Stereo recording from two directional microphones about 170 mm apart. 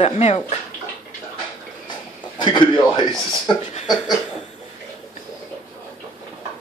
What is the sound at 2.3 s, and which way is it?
A man's voice, 25° left (ahead or behind).